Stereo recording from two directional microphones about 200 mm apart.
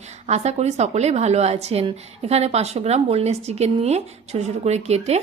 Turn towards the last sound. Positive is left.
turn(degrees=-35)  # may be behind; listen again after turning